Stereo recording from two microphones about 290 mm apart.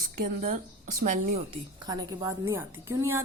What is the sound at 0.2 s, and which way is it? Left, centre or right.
Speech, right.